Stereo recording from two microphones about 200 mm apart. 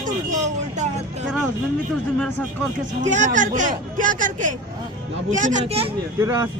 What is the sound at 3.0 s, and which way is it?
Speech, 40° right (ahead or behind).